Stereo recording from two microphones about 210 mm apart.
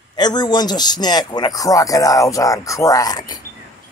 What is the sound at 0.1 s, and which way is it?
A man's voice, 20° left (ahead or behind).